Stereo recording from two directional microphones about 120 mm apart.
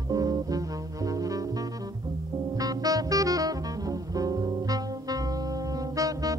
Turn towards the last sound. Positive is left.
turn(degrees=-30)  # may be behind; listen again after turning